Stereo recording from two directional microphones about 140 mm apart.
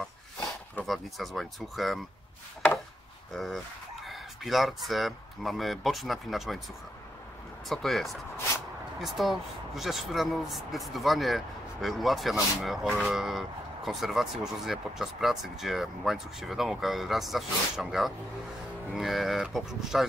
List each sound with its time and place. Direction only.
0.8 s speech: centre (ahead or behind)
3.3 s speech: centre (ahead or behind)
7.6 s speech: centre (ahead or behind)